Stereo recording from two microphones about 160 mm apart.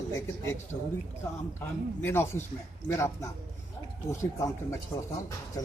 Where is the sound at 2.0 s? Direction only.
15° left (ahead or behind).